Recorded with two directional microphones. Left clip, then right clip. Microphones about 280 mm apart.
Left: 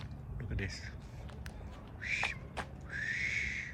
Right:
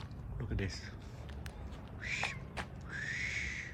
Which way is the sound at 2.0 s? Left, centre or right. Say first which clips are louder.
Left 3 dB; centre.